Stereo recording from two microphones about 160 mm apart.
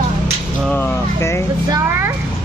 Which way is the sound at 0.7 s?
15° left (ahead or behind).